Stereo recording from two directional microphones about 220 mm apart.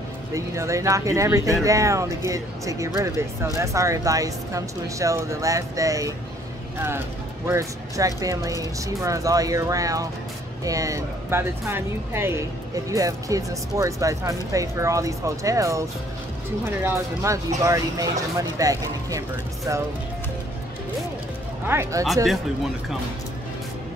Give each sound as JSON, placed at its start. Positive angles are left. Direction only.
{"t": 0.3, "sound": "speech", "side_deg": -15}
{"t": 7.4, "sound": "speech", "side_deg": -15}
{"t": 21.6, "sound": "speech", "side_deg": -10}
{"t": 22.0, "sound": "speech", "side_deg": 0}